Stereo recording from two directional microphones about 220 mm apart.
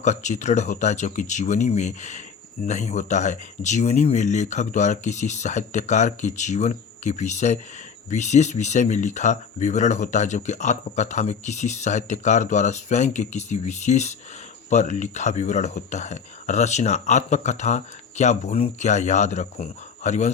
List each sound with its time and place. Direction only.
0.0 s speech: 30° left (ahead or behind)